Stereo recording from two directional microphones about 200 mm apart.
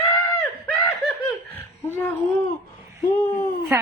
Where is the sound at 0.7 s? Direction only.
Centre (ahead or behind).